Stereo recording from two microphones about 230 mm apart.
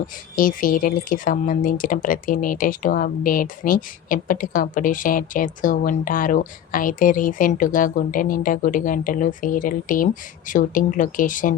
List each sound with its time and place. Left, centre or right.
0.3 s speech: left